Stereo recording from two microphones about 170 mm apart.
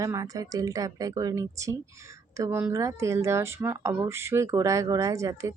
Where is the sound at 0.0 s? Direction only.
20° right (ahead or behind).